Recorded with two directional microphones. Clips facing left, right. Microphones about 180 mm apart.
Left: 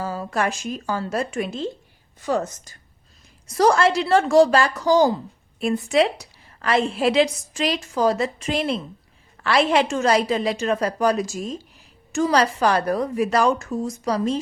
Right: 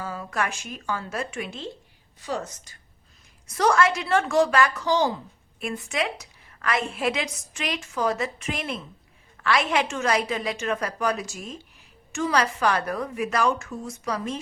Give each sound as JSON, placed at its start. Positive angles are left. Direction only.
{"t": 0.0, "sound": "a woman's voice", "side_deg": 35}
{"t": 3.5, "sound": "a woman's voice", "side_deg": 35}